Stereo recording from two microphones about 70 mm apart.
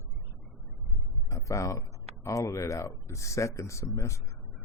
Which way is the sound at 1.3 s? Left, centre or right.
Left.